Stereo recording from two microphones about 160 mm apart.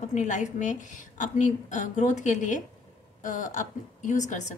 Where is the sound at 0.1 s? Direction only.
50° left (ahead or behind).